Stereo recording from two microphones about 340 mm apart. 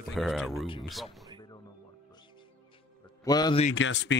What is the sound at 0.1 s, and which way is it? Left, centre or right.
Speech, centre.